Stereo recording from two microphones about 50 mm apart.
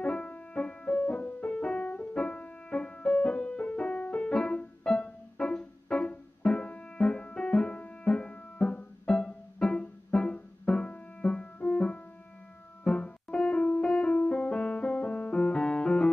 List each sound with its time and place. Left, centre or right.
0.0 s music: centre
13.0 s music: left